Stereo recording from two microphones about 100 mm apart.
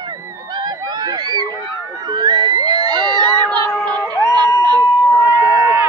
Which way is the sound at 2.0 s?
45° right (ahead or behind).